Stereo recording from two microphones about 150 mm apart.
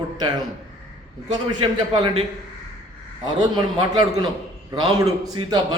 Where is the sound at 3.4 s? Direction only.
30° right (ahead or behind).